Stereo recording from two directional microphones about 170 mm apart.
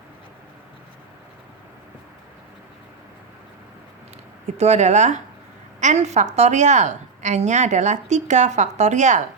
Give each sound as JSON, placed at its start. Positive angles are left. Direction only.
{"t": 4.4, "sound": "a woman's voice", "side_deg": -40}